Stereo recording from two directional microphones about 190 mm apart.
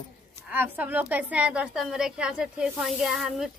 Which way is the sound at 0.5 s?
10° right (ahead or behind).